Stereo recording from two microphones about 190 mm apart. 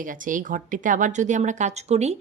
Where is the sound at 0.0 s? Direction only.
45° right (ahead or behind).